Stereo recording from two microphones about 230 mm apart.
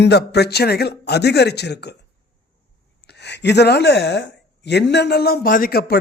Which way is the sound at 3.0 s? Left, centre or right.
Left.